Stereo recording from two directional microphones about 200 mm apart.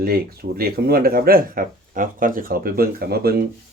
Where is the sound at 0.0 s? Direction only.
50° right (ahead or behind).